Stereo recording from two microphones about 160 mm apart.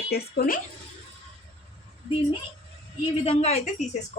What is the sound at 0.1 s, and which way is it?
Speech, 75° left (ahead or behind).